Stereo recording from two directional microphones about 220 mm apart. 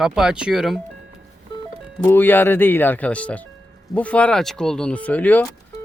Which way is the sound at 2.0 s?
10° left (ahead or behind).